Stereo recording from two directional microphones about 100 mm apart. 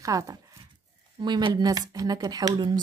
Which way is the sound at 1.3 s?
45° right (ahead or behind).